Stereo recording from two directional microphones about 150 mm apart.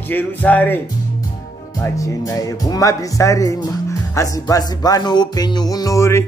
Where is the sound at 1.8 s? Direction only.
20° left (ahead or behind).